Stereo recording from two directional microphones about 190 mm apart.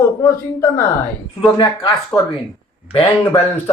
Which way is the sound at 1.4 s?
25° left (ahead or behind).